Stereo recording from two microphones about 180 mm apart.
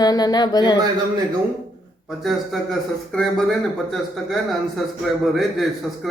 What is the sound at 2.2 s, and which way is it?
Speech, centre (ahead or behind).